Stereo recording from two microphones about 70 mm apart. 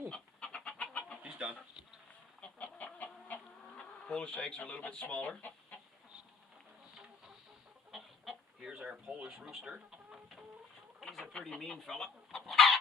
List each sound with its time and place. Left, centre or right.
0.1 s bird: centre
1.2 s chicken: centre
2.4 s chicken: left
3.8 s speech: centre
5.4 s chicken: left
7.9 s chicken: centre
8.7 s speech: centre
11.1 s bird: centre
11.3 s speech: centre
12.5 s chicken: centre